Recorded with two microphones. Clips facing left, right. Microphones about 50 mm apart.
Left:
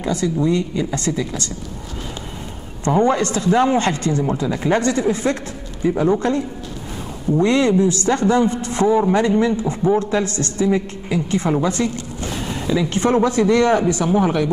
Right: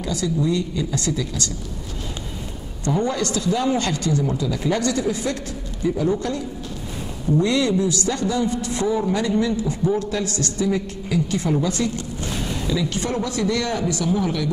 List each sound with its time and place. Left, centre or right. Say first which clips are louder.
0.0 s a man's voice: left 4 dB; left
2.8 s a man's voice: left 6 dB; left